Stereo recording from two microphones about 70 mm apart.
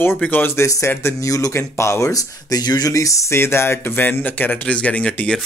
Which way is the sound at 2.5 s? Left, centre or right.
Left.